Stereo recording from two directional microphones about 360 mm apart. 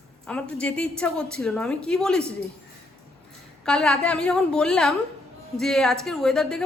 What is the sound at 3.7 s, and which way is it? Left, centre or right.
A woman's voice, centre.